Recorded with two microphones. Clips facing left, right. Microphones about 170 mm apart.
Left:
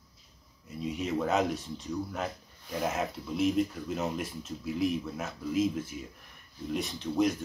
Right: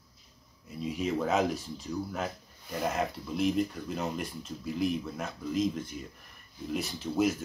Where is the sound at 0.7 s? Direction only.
Centre (ahead or behind).